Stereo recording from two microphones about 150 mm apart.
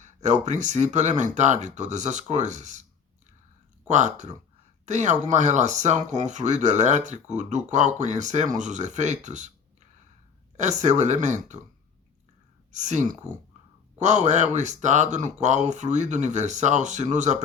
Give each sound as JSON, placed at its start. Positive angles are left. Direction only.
{"t": 0.0, "sound": "speech", "side_deg": -50}
{"t": 3.8, "sound": "speech", "side_deg": -55}
{"t": 10.6, "sound": "speech", "side_deg": -50}
{"t": 12.7, "sound": "speech", "side_deg": -55}